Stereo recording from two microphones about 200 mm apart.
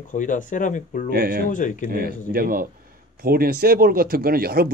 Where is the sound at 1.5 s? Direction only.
40° left (ahead or behind).